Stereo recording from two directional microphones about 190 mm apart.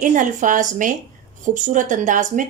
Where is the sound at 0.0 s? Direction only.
45° right (ahead or behind).